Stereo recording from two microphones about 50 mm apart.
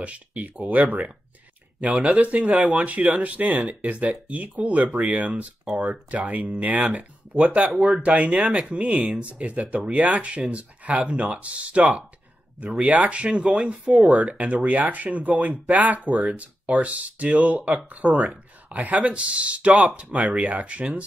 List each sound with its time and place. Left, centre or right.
0.0 s speech: right